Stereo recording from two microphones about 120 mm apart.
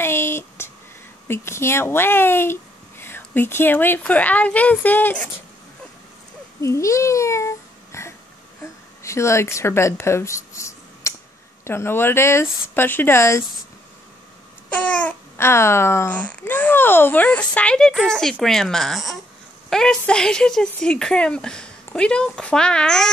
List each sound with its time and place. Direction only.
0.0 s a sound: 20° left (ahead or behind)
1.2 s speech: 20° left (ahead or behind)
6.6 s a child's voice: 25° left (ahead or behind)
14.7 s speech: 10° left (ahead or behind)